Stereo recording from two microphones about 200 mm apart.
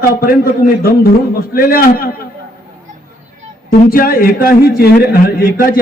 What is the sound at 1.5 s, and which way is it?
Speech, 45° left (ahead or behind).